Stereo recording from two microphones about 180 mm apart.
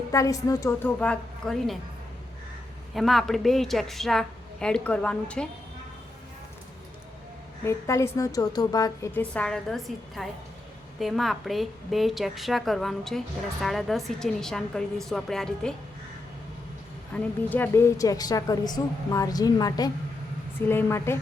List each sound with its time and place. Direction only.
0.1 s a woman's voice: 20° left (ahead or behind); by 1.8 s centre (ahead or behind)
2.9 s a woman's voice: centre (ahead or behind)
7.6 s a woman's voice: 15° left (ahead or behind)
9.3 s a woman's voice: 5° left (ahead or behind)
17.1 s a woman's voice: 5° left (ahead or behind)